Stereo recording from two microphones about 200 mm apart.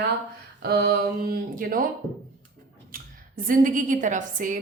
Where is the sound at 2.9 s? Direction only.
45° right (ahead or behind).